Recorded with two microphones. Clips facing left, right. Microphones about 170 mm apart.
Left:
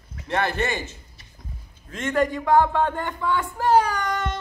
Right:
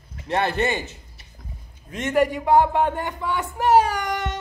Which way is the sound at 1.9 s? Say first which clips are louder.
Right 2 dB; 15° right (ahead or behind).